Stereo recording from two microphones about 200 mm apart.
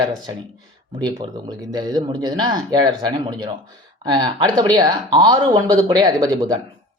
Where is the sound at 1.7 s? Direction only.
20° right (ahead or behind).